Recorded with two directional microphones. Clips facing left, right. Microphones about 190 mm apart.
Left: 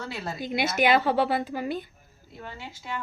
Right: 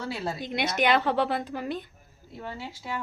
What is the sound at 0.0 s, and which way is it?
Speech, 30° right (ahead or behind).